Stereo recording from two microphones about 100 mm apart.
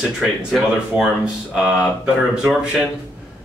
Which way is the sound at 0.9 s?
15° right (ahead or behind).